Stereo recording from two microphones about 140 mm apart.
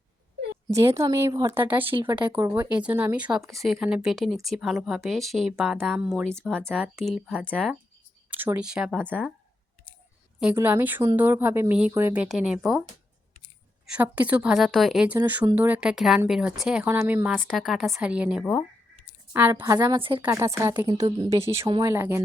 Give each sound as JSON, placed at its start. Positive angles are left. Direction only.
{"t": 0.7, "sound": "speech", "side_deg": -20}
{"t": 1.5, "sound": "speech", "side_deg": -10}
{"t": 8.3, "sound": "speech", "side_deg": -15}
{"t": 10.5, "sound": "speech", "side_deg": -15}
{"t": 13.8, "sound": "speech", "side_deg": -10}
{"t": 17.3, "sound": "speech", "side_deg": 0}
{"t": 20.0, "sound": "a woman's voice", "side_deg": -40}
{"t": 20.3, "sound": "speech", "side_deg": -20}